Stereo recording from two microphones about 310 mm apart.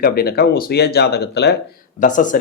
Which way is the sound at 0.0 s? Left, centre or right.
Left.